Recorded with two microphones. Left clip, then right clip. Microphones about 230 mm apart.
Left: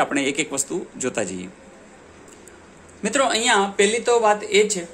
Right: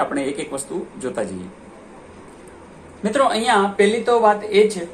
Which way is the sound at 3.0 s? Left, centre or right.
Left.